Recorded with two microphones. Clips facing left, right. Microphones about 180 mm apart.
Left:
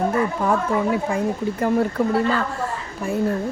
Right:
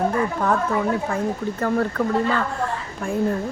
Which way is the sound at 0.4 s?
10° left (ahead or behind).